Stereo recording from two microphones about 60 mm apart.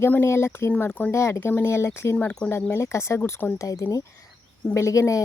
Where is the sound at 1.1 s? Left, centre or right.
Left.